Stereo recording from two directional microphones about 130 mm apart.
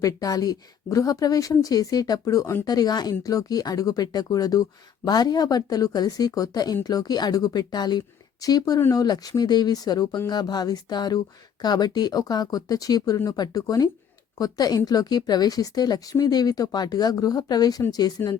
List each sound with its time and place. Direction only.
0.0 s a woman's voice: 25° left (ahead or behind)
18.2 s speech: 15° left (ahead or behind)